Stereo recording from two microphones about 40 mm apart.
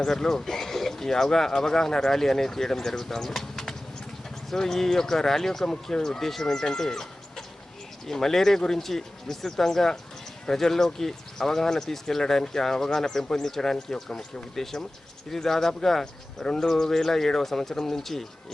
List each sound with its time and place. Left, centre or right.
0.0 s speech: centre